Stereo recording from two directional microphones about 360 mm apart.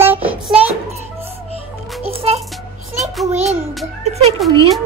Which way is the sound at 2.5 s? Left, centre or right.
Centre.